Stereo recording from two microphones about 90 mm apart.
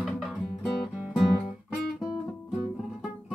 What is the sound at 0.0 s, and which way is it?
Music, 5° right (ahead or behind).